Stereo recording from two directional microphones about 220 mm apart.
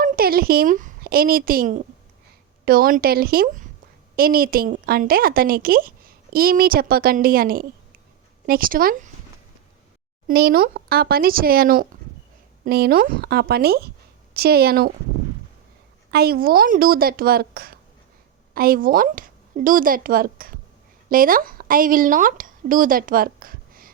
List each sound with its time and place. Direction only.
0.0 s a woman's voice: 45° right (ahead or behind)
10.2 s speech: 45° right (ahead or behind)
16.1 s a woman's voice: 45° right (ahead or behind)